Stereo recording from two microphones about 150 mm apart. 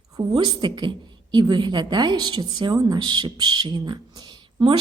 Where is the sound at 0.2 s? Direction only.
30° right (ahead or behind).